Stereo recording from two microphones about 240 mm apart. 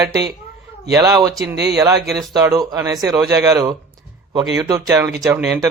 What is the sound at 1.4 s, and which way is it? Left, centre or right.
Speech, right.